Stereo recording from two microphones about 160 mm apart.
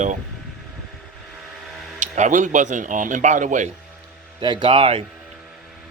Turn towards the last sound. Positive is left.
turn(degrees=-35)  # may be behind; listen again after turning